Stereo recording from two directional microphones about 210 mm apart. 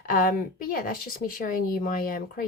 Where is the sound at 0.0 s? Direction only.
40° left (ahead or behind).